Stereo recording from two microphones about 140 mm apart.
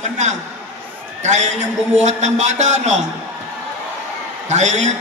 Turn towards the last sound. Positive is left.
turn(degrees=-55)  # may be behind; listen again after turning